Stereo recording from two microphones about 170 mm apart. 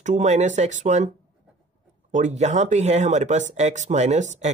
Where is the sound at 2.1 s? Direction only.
45° right (ahead or behind).